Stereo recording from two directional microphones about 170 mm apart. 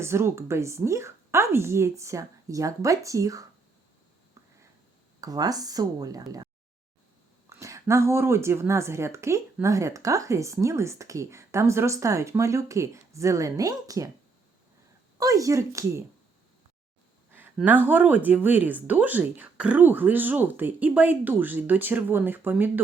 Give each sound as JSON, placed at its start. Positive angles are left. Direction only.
{"t": 0.0, "sound": "a woman's voice", "side_deg": -15}
{"t": 5.2, "sound": "speech", "side_deg": -20}
{"t": 7.5, "sound": "a woman's voice", "side_deg": -20}
{"t": 15.2, "sound": "speech", "side_deg": -20}
{"t": 17.3, "sound": "a woman's voice", "side_deg": -10}